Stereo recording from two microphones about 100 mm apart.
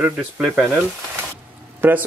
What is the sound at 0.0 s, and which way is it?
Speech, 15° right (ahead or behind).